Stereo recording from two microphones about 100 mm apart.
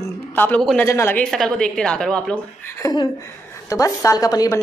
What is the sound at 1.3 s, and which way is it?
A woman's voice, 5° left (ahead or behind).